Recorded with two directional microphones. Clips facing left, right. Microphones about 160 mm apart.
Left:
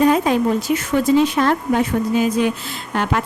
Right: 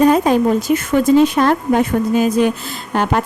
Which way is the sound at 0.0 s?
40° right (ahead or behind).